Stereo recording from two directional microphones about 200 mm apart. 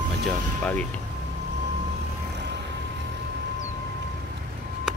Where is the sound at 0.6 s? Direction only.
10° left (ahead or behind).